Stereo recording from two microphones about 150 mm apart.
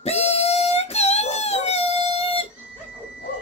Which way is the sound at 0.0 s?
45° left (ahead or behind).